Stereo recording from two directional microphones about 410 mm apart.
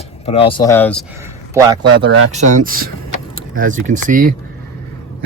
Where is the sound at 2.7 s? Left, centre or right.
Right.